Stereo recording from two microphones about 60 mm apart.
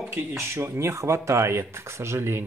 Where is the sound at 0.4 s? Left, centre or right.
Right.